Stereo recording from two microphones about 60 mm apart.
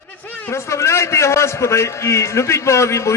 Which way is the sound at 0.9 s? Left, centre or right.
Left.